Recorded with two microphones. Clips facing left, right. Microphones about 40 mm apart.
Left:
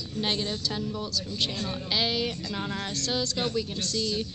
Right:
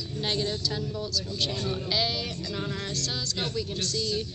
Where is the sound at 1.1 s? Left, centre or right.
Left.